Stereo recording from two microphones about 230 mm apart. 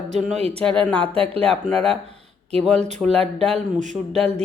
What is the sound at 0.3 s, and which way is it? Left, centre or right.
Speech, right.